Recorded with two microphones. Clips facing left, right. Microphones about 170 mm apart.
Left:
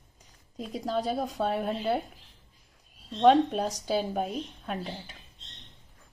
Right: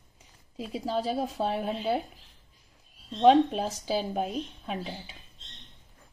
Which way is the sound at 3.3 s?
Centre (ahead or behind).